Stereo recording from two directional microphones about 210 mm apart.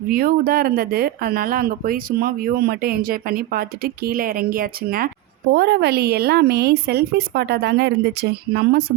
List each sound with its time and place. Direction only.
0.1 s speech: 45° right (ahead or behind)